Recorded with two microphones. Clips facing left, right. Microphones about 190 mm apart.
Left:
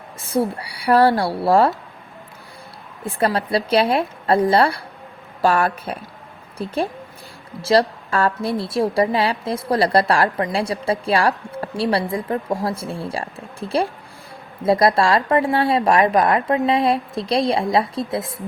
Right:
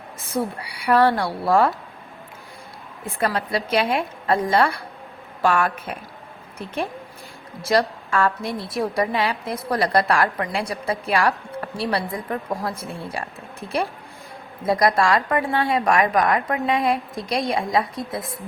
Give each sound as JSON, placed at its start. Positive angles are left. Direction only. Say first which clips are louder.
{"t": 0.3, "sound": "a woman's voice", "louder": "left 5 dB", "side_deg": 30}
{"t": 3.2, "sound": "a woman's voice", "louder": "left 4 dB", "side_deg": 30}